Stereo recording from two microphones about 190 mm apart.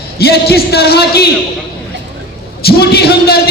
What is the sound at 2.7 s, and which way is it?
Speech, 55° left (ahead or behind).